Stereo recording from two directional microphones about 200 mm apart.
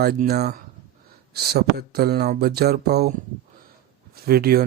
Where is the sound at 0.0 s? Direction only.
50° right (ahead or behind).